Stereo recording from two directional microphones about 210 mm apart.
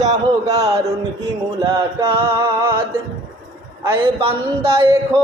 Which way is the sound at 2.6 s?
15° right (ahead or behind).